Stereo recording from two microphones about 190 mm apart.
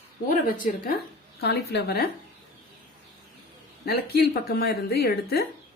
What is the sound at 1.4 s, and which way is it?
Speech, 60° left (ahead or behind).